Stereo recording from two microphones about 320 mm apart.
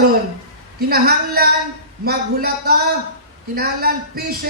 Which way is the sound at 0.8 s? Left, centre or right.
Right.